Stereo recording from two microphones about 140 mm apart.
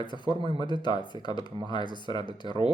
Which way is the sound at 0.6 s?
30° left (ahead or behind).